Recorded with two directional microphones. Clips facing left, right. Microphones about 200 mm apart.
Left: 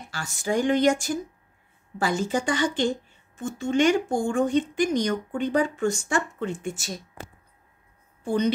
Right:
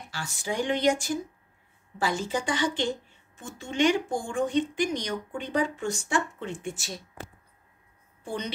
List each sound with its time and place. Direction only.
0.1 s speech: 45° left (ahead or behind)
7.2 s a sound: 40° left (ahead or behind)
8.2 s speech: 45° left (ahead or behind)